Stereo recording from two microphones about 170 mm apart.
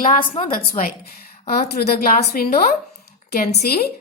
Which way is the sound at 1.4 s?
65° left (ahead or behind).